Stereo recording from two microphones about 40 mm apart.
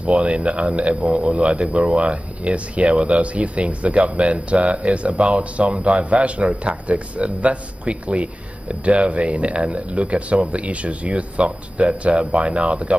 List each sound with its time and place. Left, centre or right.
0.0 s speech: right